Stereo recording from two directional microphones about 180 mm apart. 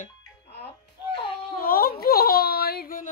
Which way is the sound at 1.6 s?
55° left (ahead or behind).